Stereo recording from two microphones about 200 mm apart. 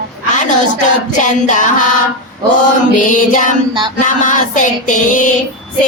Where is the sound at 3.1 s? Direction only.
40° left (ahead or behind).